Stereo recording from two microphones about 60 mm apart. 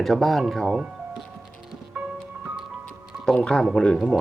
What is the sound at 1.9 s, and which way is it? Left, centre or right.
Music, right.